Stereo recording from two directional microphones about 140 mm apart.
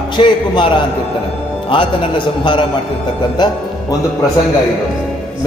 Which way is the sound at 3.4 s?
30° left (ahead or behind).